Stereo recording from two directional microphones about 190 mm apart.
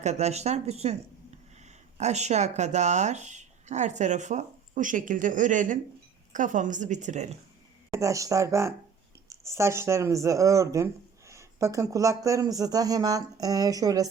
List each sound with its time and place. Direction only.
0.0 s a woman's voice: 35° right (ahead or behind)
7.9 s speech: 15° right (ahead or behind)